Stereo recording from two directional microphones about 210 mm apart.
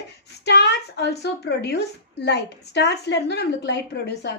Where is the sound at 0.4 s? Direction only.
55° left (ahead or behind).